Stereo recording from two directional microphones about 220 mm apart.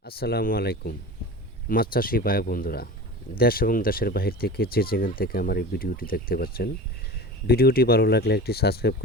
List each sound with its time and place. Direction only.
0.0 s speech: 45° left (ahead or behind)